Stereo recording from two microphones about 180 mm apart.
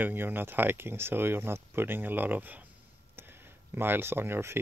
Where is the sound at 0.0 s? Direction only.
10° right (ahead or behind).